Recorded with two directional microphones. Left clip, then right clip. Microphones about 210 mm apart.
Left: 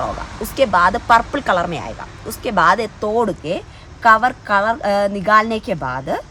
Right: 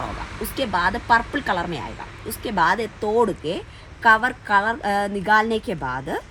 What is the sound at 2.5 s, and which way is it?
Speech, 5° left (ahead or behind).